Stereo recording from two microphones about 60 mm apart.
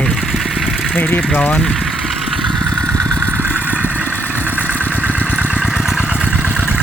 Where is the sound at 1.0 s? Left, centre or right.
Left.